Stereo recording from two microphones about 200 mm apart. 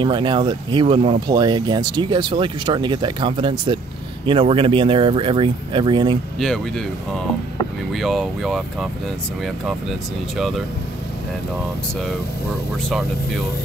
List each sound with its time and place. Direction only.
0.0 s speech: 25° right (ahead or behind)
7.9 s speech: centre (ahead or behind)